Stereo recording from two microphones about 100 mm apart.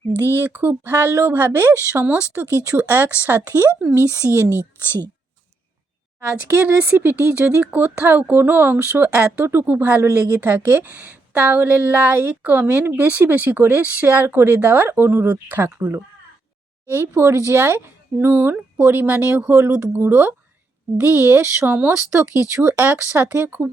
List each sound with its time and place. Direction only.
0.5 s speech: 20° right (ahead or behind)
3.9 s speech: 25° right (ahead or behind)
6.7 s speech: 20° right (ahead or behind)